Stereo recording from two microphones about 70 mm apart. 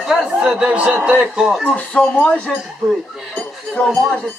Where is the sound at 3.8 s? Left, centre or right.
Centre.